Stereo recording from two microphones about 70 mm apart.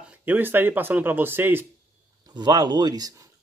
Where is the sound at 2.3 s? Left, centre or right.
Right.